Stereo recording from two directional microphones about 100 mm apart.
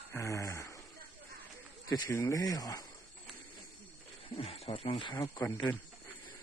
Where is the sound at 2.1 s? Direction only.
30° left (ahead or behind).